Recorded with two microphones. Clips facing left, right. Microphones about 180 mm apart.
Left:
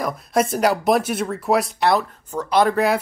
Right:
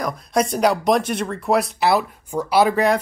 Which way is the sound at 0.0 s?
Centre (ahead or behind).